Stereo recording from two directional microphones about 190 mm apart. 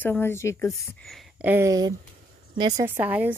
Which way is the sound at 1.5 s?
15° right (ahead or behind).